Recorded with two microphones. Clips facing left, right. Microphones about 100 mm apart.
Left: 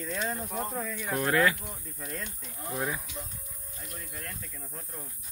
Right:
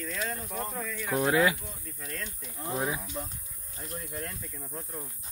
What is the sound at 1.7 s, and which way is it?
Speech, 15° left (ahead or behind).